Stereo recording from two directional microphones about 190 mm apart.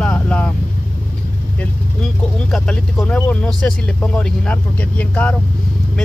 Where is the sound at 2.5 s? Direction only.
Centre (ahead or behind).